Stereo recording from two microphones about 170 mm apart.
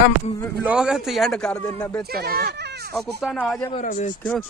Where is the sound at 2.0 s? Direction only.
65° right (ahead or behind).